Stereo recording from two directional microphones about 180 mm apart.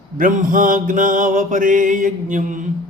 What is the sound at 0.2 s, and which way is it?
A man's voice, 50° right (ahead or behind).